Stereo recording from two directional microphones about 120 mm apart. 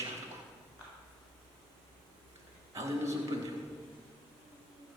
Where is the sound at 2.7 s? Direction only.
25° right (ahead or behind).